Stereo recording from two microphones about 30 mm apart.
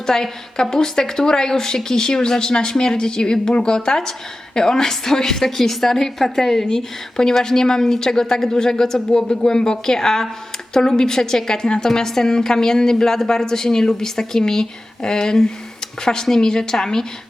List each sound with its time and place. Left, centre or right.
0.0 s a woman's voice: centre